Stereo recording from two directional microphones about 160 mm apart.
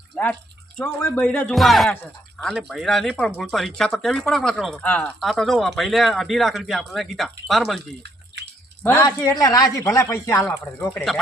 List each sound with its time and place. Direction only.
0.1 s speech: 5° left (ahead or behind)
7.8 s a sound: 90° right
8.8 s speech: 20° left (ahead or behind)
10.9 s speech: centre (ahead or behind)